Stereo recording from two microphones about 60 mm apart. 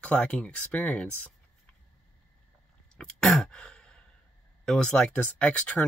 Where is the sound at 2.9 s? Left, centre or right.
Centre.